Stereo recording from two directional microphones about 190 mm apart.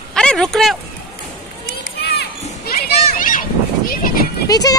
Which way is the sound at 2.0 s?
60° left (ahead or behind).